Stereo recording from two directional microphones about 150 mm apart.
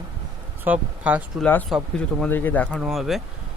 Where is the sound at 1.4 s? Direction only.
10° left (ahead or behind).